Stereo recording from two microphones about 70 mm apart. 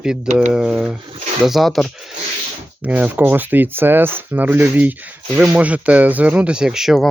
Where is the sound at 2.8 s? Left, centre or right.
Right; by 7.1 s centre.